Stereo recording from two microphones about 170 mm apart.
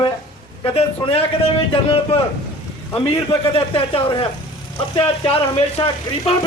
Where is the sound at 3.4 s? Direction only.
35° left (ahead or behind).